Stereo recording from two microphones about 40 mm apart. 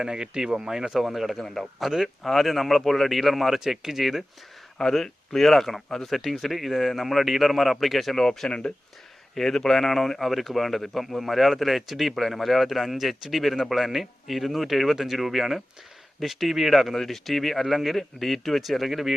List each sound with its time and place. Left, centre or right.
0.0 s speech: centre
1.4 s speech: centre
5.0 s speech: centre
8.2 s speech: centre
9.3 s speech: centre